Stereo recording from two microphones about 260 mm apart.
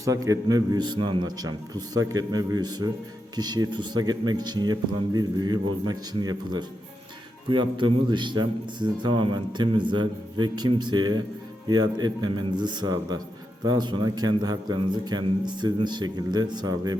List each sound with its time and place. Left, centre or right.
0.0 s a man's voice: centre